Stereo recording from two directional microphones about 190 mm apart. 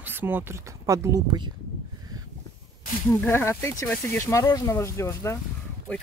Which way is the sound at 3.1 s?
10° left (ahead or behind).